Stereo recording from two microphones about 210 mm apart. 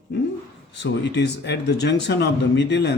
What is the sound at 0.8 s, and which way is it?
Speech, 55° left (ahead or behind).